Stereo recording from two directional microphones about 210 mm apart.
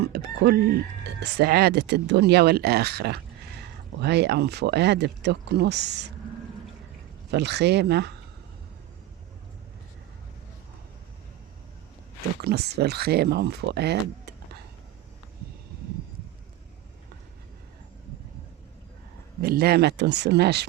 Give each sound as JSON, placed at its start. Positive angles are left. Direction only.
{"t": 0.0, "sound": "chicken", "side_deg": -50}
{"t": 1.2, "sound": "speech", "side_deg": -50}
{"t": 7.3, "sound": "speech", "side_deg": -55}
{"t": 12.4, "sound": "speech", "side_deg": -50}
{"t": 19.4, "sound": "speech", "side_deg": -45}